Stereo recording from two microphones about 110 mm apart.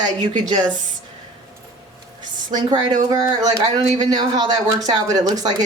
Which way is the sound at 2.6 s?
35° right (ahead or behind).